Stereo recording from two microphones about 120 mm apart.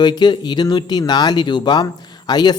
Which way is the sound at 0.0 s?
35° left (ahead or behind).